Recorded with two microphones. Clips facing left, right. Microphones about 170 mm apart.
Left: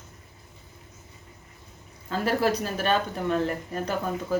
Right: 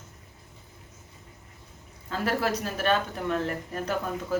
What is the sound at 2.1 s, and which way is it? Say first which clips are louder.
Speech: left 3 dB; centre (ahead or behind).